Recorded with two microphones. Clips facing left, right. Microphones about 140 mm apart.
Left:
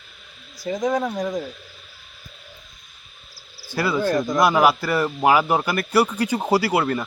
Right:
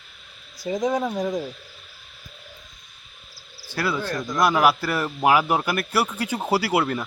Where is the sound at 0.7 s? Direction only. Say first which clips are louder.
Left 1 dB; centre (ahead or behind).